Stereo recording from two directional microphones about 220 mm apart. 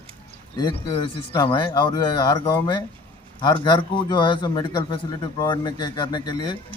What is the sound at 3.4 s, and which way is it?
Speech, 20° left (ahead or behind).